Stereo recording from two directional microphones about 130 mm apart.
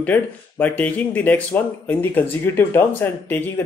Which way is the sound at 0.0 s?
10° left (ahead or behind).